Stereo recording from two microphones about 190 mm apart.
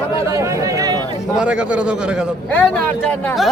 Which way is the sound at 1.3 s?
5° right (ahead or behind).